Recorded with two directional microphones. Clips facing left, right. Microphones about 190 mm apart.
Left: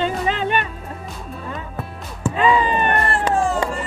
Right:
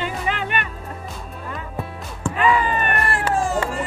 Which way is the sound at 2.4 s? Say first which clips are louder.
Left 2 dB; 20° left (ahead or behind).